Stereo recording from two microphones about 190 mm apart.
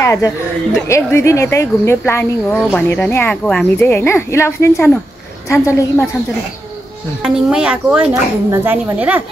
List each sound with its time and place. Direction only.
0.0 s speech: 15° left (ahead or behind)
7.2 s speech: 5° right (ahead or behind)